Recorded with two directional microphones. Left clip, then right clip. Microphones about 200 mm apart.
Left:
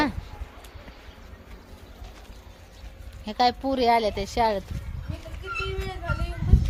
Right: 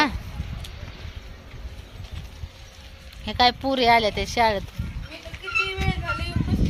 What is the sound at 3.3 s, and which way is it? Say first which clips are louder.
Speech: right 3 dB; 15° right (ahead or behind).